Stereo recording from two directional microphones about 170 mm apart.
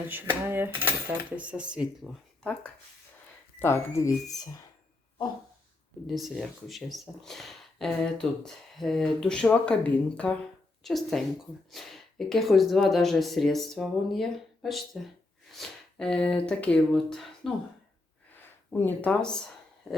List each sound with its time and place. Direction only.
0.1 s coin: 10° right (ahead or behind)
2.4 s speech: 5° left (ahead or behind)
6.1 s speech: centre (ahead or behind)
18.7 s speech: 10° left (ahead or behind)